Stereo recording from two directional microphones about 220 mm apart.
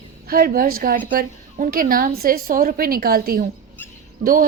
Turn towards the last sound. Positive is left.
turn(degrees=-40)  # may be behind; listen again after turning